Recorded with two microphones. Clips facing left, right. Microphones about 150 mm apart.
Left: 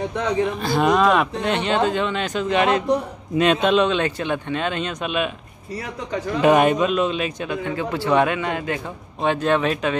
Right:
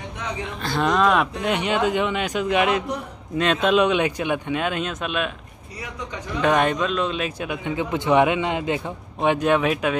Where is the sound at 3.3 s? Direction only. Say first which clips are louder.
Left 2 dB; 5° left (ahead or behind).